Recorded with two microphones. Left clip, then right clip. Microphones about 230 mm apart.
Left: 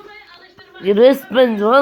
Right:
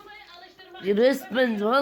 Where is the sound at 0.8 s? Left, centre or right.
Centre.